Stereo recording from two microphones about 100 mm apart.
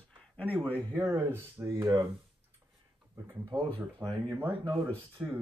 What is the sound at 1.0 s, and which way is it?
Speech, 30° right (ahead or behind).